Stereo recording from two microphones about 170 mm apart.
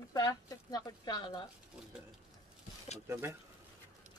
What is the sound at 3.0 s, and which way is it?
Speech, 15° right (ahead or behind).